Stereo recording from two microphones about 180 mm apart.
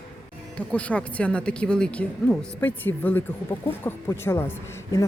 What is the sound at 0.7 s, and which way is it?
Speech, 5° left (ahead or behind).